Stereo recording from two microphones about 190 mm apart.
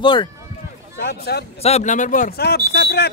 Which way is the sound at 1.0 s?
55° left (ahead or behind).